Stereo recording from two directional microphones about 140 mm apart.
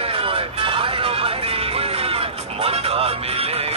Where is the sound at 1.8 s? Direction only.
45° right (ahead or behind).